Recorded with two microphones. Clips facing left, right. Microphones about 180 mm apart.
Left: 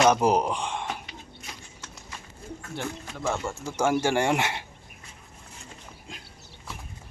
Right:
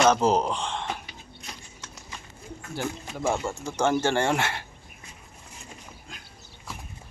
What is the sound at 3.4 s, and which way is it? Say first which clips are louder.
Speech: right 1 dB; 5° left (ahead or behind).